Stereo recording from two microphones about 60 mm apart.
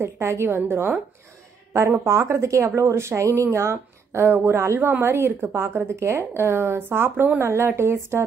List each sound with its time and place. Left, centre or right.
0.0 s a woman's voice: right
1.7 s a woman's voice: right